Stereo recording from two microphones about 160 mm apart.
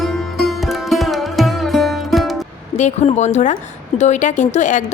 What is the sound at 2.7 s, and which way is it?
Speech, 45° left (ahead or behind).